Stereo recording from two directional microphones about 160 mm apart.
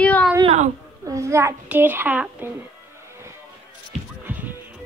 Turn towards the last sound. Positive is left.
turn(degrees=-10)  # may be behind; listen again after turning